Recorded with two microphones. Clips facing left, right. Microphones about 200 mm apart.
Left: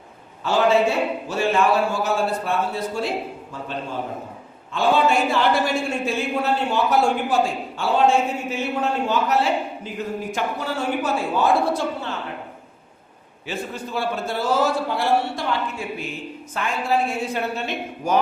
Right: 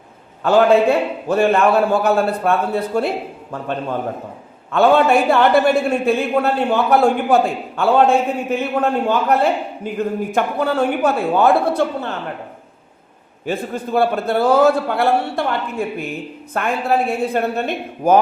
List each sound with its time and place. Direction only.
0.4 s a woman's voice: 55° right (ahead or behind)
13.4 s a woman's voice: 55° right (ahead or behind)